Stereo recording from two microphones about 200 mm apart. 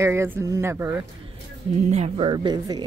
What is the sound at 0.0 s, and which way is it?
Speech, 15° right (ahead or behind).